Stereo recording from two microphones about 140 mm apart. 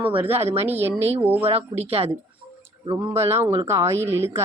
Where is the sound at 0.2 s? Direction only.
15° right (ahead or behind).